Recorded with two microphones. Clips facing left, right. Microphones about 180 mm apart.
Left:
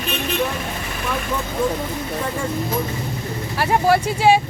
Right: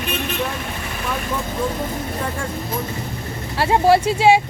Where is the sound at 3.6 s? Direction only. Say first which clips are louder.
Right 2 dB; 25° right (ahead or behind).